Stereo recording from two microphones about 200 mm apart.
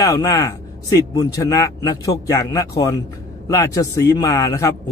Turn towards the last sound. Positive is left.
turn(degrees=15)  # may be behind; listen again after turning